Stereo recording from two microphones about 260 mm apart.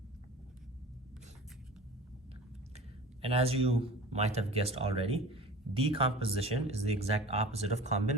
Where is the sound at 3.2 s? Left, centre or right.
Right.